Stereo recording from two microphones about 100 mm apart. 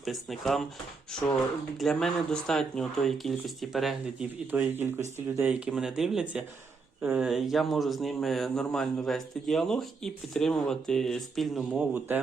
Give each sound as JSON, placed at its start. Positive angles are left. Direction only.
{"t": 0.0, "sound": "a man's voice", "side_deg": 0}
{"t": 4.5, "sound": "speech", "side_deg": -20}
{"t": 7.0, "sound": "speech", "side_deg": -15}
{"t": 7.3, "sound": "a man's voice", "side_deg": 0}
{"t": 11.9, "sound": "speech", "side_deg": -20}